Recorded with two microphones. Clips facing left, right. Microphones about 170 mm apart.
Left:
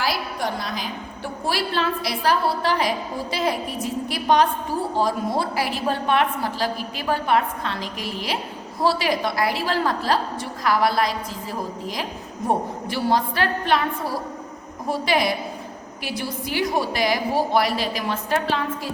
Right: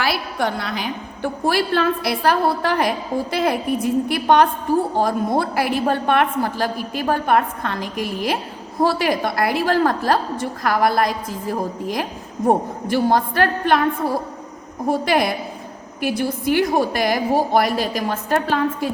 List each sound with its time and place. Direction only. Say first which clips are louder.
0.0 s a woman's voice: right 3 dB; 65° right (ahead or behind); by 18.9 s 50° right (ahead or behind)